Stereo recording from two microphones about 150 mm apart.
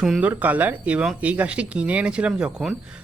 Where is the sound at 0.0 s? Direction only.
5° right (ahead or behind).